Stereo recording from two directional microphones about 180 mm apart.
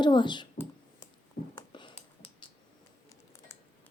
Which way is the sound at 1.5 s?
25° left (ahead or behind).